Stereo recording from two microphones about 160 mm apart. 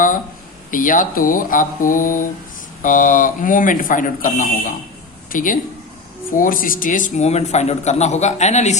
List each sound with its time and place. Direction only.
0.7 s a man's voice: 55° left (ahead or behind)